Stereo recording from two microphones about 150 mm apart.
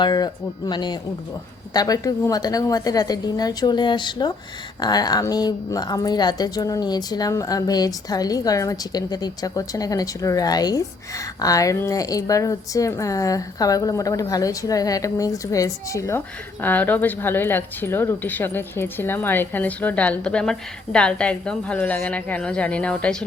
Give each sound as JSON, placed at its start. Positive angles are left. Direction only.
{"t": 0.0, "sound": "a woman's voice", "side_deg": 25}